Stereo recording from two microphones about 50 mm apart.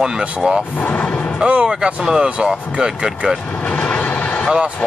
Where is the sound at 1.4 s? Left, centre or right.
Right.